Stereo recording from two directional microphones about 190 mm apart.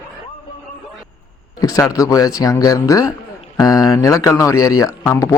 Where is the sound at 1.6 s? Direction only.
20° left (ahead or behind).